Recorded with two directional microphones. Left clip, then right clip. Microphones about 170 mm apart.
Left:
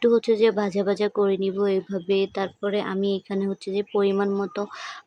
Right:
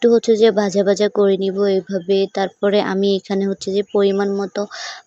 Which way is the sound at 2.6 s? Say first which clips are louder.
Right 10 dB; 40° right (ahead or behind).